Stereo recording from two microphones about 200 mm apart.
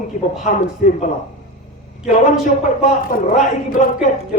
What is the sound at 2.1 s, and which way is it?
A man's voice, 40° left (ahead or behind).